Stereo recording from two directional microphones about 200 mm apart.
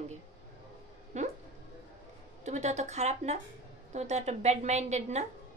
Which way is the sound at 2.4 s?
35° right (ahead or behind).